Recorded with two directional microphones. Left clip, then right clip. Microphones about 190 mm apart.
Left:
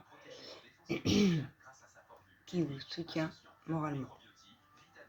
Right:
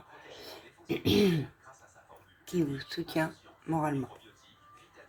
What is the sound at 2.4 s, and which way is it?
Speech, 45° right (ahead or behind).